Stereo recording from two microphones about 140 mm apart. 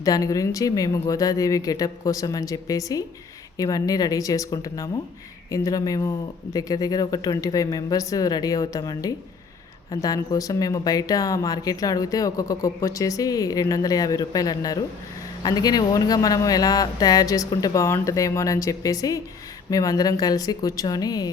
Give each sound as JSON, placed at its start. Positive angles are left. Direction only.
{"t": 0.0, "sound": "speech", "side_deg": 25}